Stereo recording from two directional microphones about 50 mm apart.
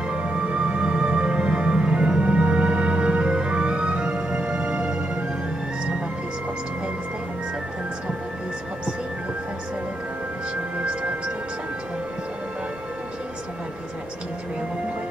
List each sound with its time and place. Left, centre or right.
0.1 s music: right
10.9 s music: centre